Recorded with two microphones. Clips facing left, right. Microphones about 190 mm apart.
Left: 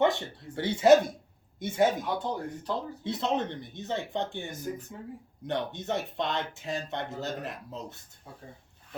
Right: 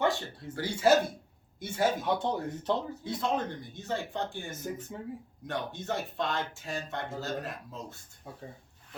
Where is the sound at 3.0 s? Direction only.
25° left (ahead or behind).